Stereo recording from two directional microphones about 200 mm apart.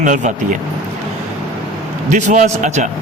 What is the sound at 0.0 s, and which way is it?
Speech, 40° right (ahead or behind).